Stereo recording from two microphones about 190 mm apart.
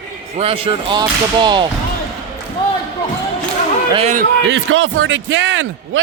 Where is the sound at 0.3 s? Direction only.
30° right (ahead or behind).